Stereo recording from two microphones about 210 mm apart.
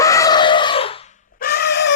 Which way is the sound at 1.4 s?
45° left (ahead or behind).